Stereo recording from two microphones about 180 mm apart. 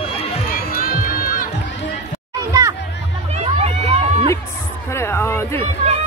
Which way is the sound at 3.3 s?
35° right (ahead or behind).